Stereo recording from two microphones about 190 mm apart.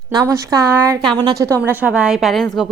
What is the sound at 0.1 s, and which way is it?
A woman's voice, 20° right (ahead or behind).